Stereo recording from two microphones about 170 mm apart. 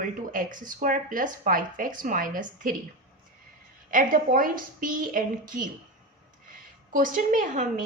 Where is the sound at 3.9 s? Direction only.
55° right (ahead or behind).